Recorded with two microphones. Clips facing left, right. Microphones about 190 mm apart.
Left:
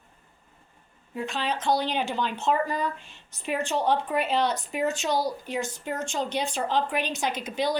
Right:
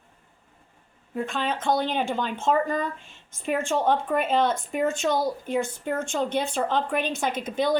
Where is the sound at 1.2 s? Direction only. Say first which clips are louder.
Right 2 dB; 50° right (ahead or behind).